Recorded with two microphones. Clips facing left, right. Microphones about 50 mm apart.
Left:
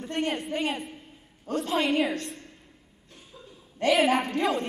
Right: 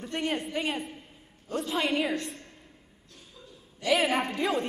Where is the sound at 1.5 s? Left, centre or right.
Left.